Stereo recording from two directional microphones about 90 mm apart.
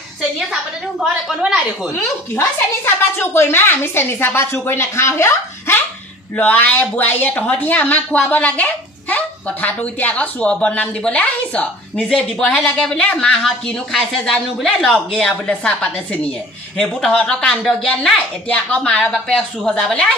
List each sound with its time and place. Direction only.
0.2 s a woman's voice: 5° right (ahead or behind)
2.0 s a woman's voice: 25° left (ahead or behind)
6.3 s speech: 20° left (ahead or behind)